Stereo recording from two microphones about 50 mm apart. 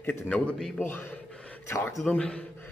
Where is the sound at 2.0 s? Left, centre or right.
Centre.